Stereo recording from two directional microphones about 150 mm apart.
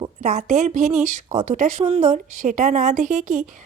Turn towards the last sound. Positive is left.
turn(degrees=-55)  # may be behind; listen again after turning